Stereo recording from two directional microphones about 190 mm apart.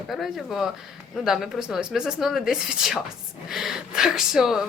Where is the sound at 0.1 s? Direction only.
Centre (ahead or behind).